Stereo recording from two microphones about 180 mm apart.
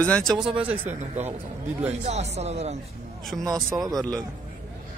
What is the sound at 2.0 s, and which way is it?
Speech, 35° right (ahead or behind).